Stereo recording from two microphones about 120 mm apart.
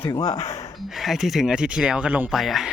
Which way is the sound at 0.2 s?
30° left (ahead or behind).